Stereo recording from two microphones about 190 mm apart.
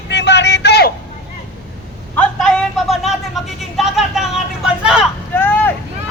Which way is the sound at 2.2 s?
5° left (ahead or behind).